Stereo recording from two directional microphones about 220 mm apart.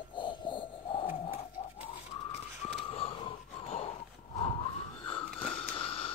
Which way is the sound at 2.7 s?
25° left (ahead or behind).